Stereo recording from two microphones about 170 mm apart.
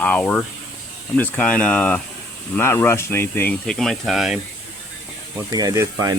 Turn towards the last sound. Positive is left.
turn(degrees=-20)  # may be behind; listen again after turning